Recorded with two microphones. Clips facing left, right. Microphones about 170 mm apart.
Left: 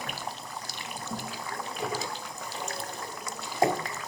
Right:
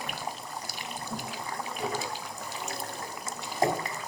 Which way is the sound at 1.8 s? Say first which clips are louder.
Right 1 dB; 5° right (ahead or behind).